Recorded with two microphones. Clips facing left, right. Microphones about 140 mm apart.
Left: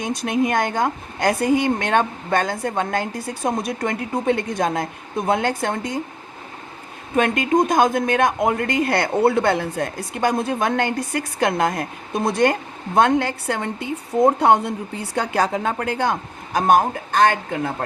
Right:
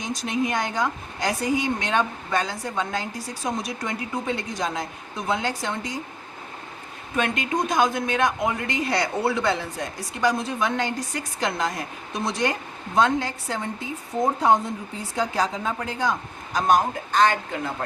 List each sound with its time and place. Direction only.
0.0 s speech: 55° left (ahead or behind)
7.2 s speech: 50° left (ahead or behind)